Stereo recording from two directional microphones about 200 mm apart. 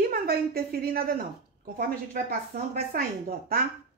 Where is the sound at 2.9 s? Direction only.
45° right (ahead or behind).